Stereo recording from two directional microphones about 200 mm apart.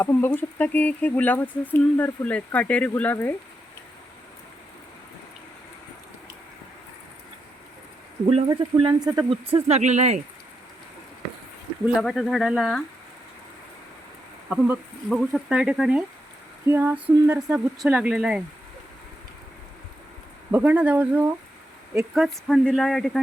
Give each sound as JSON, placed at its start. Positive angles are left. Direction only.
{"t": 0.0, "sound": "speech", "side_deg": 10}
{"t": 8.4, "sound": "speech", "side_deg": -20}
{"t": 11.9, "sound": "speech", "side_deg": 0}
{"t": 14.5, "sound": "speech", "side_deg": -5}
{"t": 20.5, "sound": "speech", "side_deg": -10}